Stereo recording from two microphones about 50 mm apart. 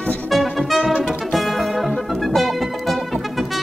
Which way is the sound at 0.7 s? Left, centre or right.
Right.